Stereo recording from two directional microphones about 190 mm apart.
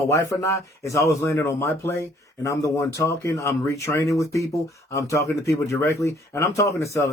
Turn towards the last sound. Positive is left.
turn(degrees=15)  # may be behind; listen again after turning